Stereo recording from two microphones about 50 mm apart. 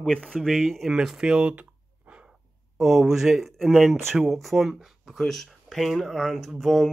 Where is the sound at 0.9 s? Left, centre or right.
Centre.